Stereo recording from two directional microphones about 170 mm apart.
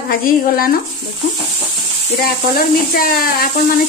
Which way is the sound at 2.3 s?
60° left (ahead or behind).